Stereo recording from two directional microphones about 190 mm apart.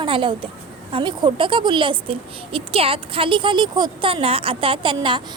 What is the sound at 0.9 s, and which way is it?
A woman's voice, 25° right (ahead or behind).